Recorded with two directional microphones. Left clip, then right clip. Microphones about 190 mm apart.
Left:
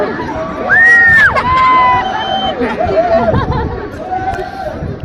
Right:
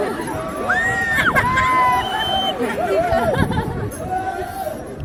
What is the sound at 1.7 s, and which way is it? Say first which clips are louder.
Run: left 6 dB; 45° right (ahead or behind).